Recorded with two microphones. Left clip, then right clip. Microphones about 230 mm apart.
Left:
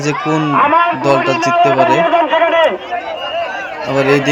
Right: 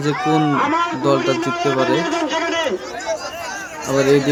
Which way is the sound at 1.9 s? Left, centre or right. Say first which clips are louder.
Left 8 dB; centre.